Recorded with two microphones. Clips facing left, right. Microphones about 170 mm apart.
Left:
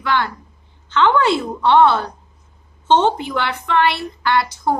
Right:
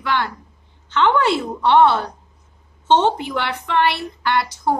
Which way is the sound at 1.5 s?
15° right (ahead or behind).